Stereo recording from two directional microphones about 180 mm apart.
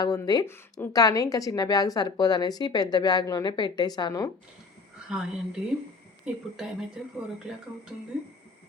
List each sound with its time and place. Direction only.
0.0 s a woman's voice: 20° left (ahead or behind)
5.0 s a woman's voice: 5° right (ahead or behind)